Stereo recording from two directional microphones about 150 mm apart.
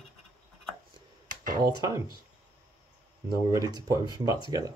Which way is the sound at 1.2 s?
60° right (ahead or behind).